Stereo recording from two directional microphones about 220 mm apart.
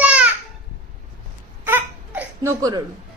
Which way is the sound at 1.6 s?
10° right (ahead or behind).